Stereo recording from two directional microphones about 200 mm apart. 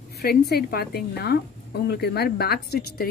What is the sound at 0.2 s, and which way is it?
A woman's voice, 50° left (ahead or behind).